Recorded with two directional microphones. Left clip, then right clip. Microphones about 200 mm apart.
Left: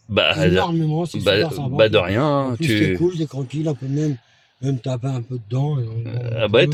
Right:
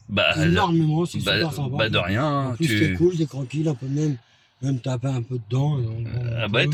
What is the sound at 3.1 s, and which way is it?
Speech, 25° left (ahead or behind).